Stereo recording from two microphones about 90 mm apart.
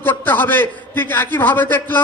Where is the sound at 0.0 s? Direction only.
20° left (ahead or behind).